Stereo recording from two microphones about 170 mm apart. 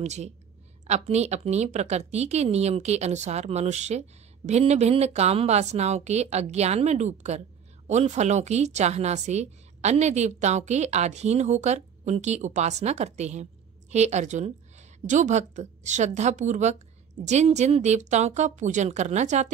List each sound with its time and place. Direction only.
0.0 s a woman's voice: 40° right (ahead or behind)